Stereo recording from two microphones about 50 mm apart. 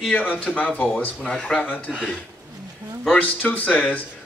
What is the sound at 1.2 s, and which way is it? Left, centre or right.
Speech, centre.